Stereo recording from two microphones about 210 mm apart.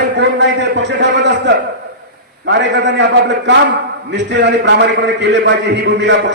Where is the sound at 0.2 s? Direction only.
55° right (ahead or behind).